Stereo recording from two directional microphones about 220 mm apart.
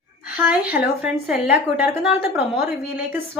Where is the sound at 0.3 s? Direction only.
5° right (ahead or behind).